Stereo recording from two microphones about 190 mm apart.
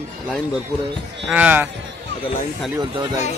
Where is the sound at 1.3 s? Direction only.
10° right (ahead or behind).